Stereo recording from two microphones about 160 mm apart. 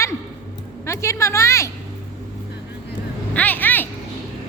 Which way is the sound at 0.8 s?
15° left (ahead or behind).